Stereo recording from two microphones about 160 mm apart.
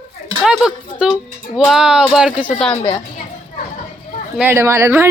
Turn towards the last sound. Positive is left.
turn(degrees=-15)  # may be behind; listen again after turning